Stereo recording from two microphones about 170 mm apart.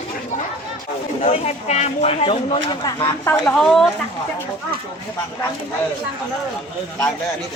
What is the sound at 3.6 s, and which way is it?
Speech, centre (ahead or behind).